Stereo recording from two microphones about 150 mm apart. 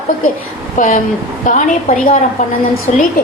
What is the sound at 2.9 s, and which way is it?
Speech, 55° left (ahead or behind).